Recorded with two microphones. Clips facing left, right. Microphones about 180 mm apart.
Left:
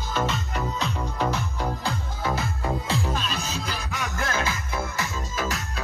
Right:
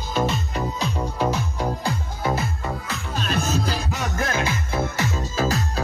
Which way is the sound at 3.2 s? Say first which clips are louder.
Right 7 dB; 50° right (ahead or behind).